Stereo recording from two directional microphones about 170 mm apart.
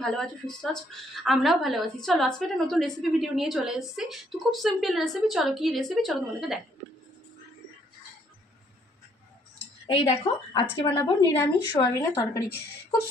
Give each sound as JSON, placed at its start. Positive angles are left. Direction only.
{"t": 0.0, "sound": "a woman's voice", "side_deg": 5}
{"t": 9.9, "sound": "a woman's voice", "side_deg": 35}